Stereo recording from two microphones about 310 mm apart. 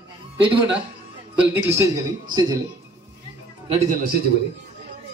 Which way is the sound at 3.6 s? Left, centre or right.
Centre.